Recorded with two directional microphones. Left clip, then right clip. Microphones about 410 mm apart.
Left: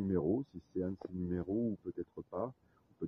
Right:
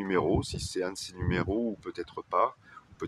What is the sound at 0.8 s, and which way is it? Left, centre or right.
Speech, left.